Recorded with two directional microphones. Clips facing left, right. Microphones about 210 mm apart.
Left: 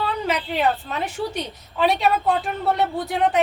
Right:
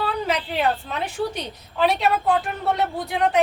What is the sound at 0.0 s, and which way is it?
A woman's voice, centre (ahead or behind).